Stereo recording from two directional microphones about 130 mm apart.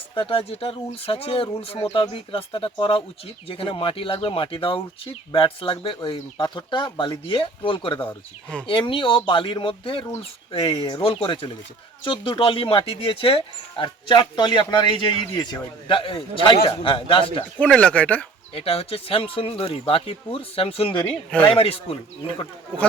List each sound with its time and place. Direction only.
0.1 s speech: 40° left (ahead or behind)
17.6 s speech: 10° left (ahead or behind)
18.5 s speech: 50° left (ahead or behind)
21.2 s speech: 10° left (ahead or behind)
21.5 s speech: 45° left (ahead or behind)